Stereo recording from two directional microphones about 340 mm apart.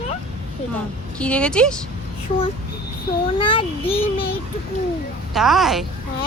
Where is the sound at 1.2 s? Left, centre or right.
Centre.